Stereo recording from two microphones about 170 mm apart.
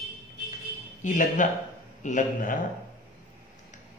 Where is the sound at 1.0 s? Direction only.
45° left (ahead or behind).